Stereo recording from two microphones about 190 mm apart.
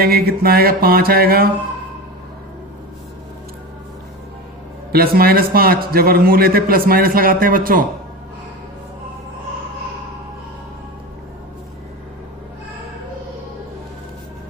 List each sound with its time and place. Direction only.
0.0 s a man's voice: 55° right (ahead or behind)
4.9 s a man's voice: 55° right (ahead or behind)